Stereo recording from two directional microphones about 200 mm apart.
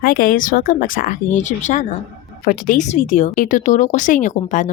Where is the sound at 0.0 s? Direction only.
45° left (ahead or behind).